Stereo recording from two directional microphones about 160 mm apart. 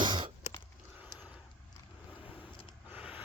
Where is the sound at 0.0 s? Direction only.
30° right (ahead or behind).